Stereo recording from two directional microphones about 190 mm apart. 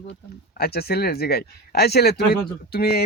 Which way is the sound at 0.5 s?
55° left (ahead or behind).